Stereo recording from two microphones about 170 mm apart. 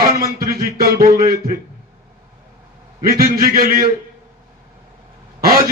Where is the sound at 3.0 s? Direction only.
60° right (ahead or behind).